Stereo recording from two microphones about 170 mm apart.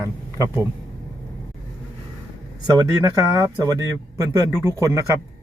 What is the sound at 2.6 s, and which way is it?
Speech, 20° right (ahead or behind).